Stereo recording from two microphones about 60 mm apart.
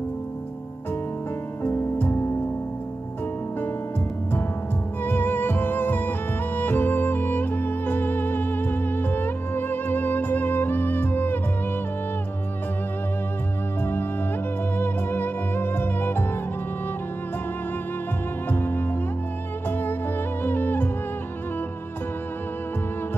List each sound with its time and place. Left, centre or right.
1.6 s music: left
5.0 s music: left
14.8 s music: left
18.5 s music: left
20.4 s music: left